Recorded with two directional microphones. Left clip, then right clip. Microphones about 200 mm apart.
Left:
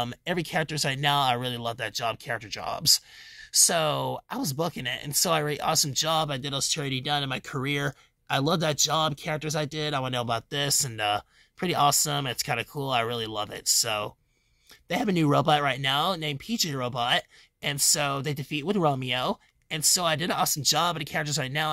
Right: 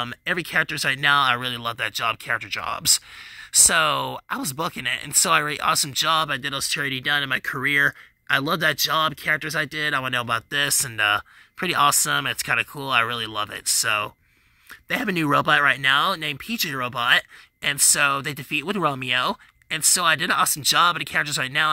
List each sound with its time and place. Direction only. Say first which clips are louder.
0.0 s speech: right 4 dB; 10° right (ahead or behind)